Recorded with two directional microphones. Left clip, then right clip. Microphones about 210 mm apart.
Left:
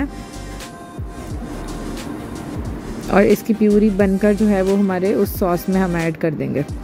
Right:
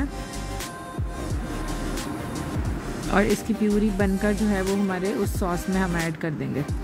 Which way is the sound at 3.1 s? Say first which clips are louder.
Left 8 dB; 15° left (ahead or behind).